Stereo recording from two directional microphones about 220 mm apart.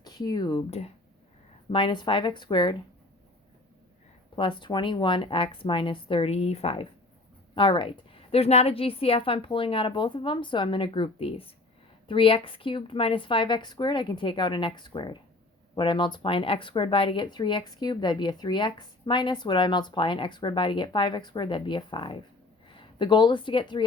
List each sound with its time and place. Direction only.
0.0 s speech: 20° left (ahead or behind)
4.4 s speech: 20° left (ahead or behind)